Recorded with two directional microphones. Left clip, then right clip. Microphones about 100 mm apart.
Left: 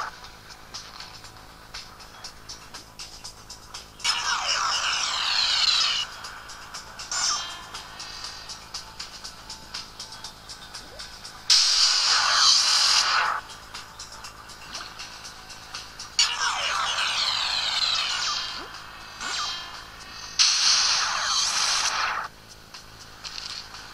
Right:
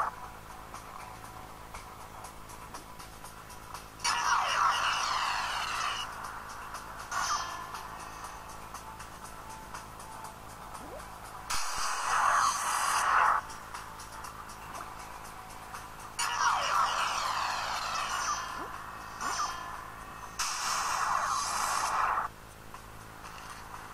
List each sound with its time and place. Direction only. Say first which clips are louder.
4.0 s vehicle: left 3 dB; 15° left (ahead or behind)
11.7 s music: left 10 dB; 10° left (ahead or behind)
15.7 s music: left 14 dB; 10° left (ahead or behind)
20.6 s a sound: left 9 dB; 15° left (ahead or behind)